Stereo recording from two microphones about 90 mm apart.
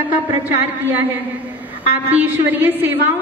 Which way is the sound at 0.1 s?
20° right (ahead or behind).